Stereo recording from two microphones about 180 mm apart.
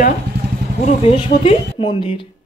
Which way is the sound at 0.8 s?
35° left (ahead or behind).